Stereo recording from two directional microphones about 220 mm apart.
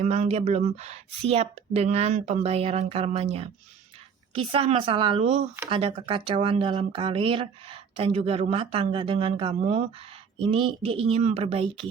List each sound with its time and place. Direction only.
0.0 s speech: 30° right (ahead or behind)